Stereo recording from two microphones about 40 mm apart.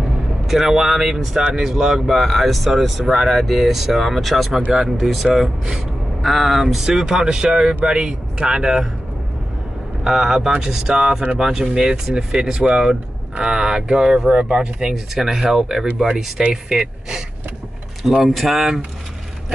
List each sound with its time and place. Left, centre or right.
0.5 s speech: centre
10.0 s speech: centre
18.0 s speech: centre